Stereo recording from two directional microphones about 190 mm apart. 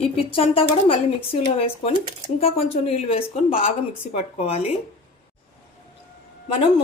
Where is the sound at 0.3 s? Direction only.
30° left (ahead or behind).